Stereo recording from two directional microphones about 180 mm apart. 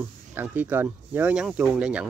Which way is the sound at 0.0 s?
10° right (ahead or behind).